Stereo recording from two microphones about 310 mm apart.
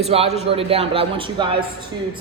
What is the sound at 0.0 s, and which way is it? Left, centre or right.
A woman's voice, centre.